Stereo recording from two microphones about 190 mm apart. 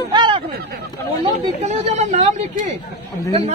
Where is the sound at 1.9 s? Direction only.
35° right (ahead or behind).